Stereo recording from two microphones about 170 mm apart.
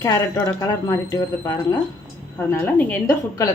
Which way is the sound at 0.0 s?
20° left (ahead or behind).